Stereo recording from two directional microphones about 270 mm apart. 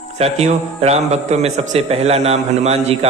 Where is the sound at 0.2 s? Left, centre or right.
Right.